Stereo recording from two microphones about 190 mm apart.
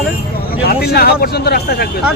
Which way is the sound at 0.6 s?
55° left (ahead or behind).